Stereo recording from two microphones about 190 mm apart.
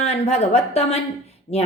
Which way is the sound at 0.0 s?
35° left (ahead or behind).